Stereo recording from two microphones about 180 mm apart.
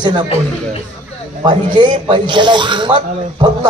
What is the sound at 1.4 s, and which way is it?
Speech, 25° right (ahead or behind).